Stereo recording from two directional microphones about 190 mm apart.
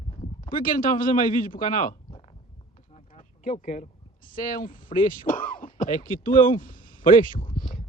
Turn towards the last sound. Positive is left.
turn(degrees=45)  # may be behind; listen again after turning